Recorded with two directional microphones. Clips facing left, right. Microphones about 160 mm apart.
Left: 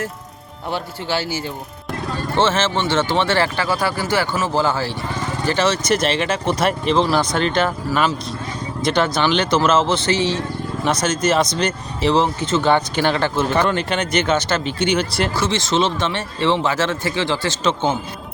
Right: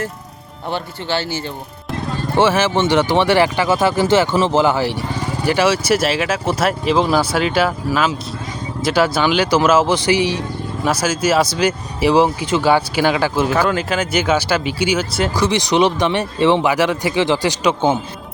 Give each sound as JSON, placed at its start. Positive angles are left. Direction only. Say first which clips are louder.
{"t": 0.7, "sound": "speech", "louder": "right 1 dB", "side_deg": 5}
{"t": 2.3, "sound": "speech", "louder": "right 4 dB", "side_deg": -10}
{"t": 15.4, "sound": "speech", "louder": "right 5 dB", "side_deg": -15}